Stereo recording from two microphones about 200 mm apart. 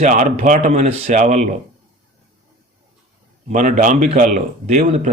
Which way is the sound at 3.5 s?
40° right (ahead or behind).